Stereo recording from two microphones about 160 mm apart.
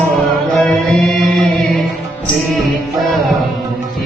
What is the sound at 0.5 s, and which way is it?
Chant, centre (ahead or behind).